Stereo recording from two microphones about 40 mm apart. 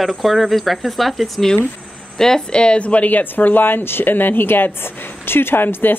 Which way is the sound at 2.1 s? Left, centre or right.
Centre.